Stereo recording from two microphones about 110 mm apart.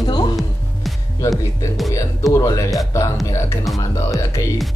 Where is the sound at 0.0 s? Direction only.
40° left (ahead or behind).